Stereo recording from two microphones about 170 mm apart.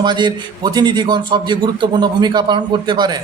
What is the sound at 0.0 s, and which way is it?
A man's voice, 25° right (ahead or behind).